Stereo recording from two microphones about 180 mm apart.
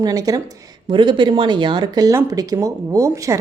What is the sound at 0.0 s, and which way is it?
Speech, 20° right (ahead or behind).